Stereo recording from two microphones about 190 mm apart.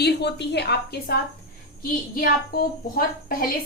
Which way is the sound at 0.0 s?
60° left (ahead or behind).